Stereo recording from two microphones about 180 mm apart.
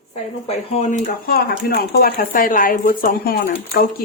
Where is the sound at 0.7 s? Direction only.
40° left (ahead or behind).